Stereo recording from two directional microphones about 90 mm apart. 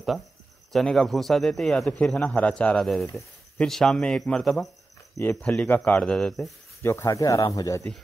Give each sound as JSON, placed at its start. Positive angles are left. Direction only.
{"t": 0.7, "sound": "speech", "side_deg": 5}
{"t": 5.2, "sound": "speech", "side_deg": 20}
{"t": 6.8, "sound": "speech", "side_deg": 25}
{"t": 7.1, "sound": "speech", "side_deg": 40}